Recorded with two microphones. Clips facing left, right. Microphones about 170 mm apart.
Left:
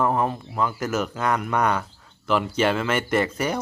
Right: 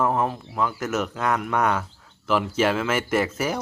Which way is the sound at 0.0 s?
Centre (ahead or behind).